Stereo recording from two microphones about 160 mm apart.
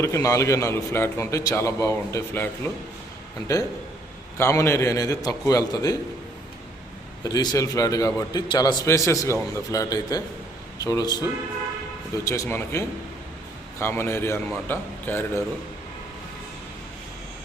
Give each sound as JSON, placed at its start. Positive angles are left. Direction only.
{"t": 0.0, "sound": "a man's voice", "side_deg": 20}
{"t": 4.4, "sound": "a man's voice", "side_deg": 15}
{"t": 7.3, "sound": "a man's voice", "side_deg": 20}